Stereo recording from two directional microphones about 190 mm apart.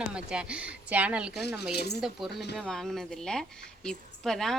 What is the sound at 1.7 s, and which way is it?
Speech, 60° left (ahead or behind).